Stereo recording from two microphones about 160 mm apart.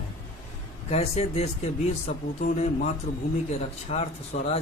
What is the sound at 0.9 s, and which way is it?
Speech, 45° left (ahead or behind).